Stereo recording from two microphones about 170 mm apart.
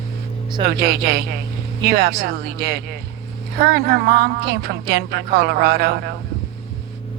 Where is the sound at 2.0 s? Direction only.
70° right (ahead or behind).